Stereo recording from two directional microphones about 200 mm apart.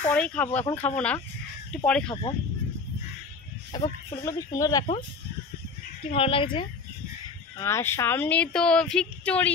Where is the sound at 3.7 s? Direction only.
25° left (ahead or behind).